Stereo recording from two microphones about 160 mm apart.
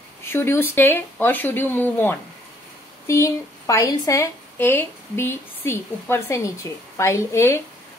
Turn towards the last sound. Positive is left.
turn(degrees=15)  # may be behind; listen again after turning